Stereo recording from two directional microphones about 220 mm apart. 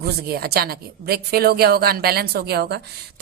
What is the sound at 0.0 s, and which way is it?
A woman's voice, 45° right (ahead or behind).